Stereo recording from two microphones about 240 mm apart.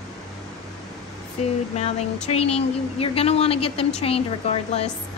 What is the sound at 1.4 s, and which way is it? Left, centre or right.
A woman's voice, left.